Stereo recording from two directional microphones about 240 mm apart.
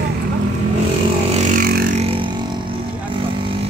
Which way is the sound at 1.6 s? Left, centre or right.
Right.